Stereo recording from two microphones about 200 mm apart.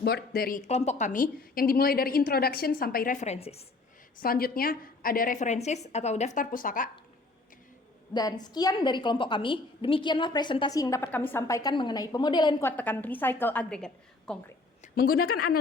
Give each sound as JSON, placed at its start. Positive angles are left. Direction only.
{"t": 0.0, "sound": "speech", "side_deg": 50}
{"t": 4.2, "sound": "speech", "side_deg": 50}
{"t": 8.1, "sound": "a woman's voice", "side_deg": 20}
{"t": 12.6, "sound": "a woman's voice", "side_deg": 10}
{"t": 14.9, "sound": "speech", "side_deg": 50}